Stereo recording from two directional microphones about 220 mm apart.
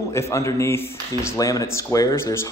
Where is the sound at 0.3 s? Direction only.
15° left (ahead or behind).